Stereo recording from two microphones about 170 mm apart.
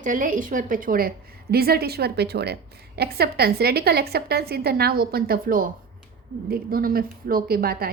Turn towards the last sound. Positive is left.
turn(degrees=-60)  # may be behind; listen again after turning